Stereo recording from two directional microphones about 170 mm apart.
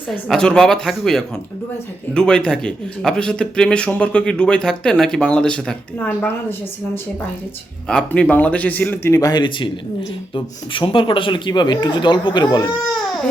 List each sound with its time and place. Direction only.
0.1 s speech: 5° left (ahead or behind)
7.9 s speech: 5° left (ahead or behind); by 12.7 s 25° left (ahead or behind)